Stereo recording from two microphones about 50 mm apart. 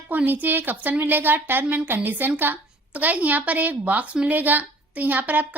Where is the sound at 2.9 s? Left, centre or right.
Right.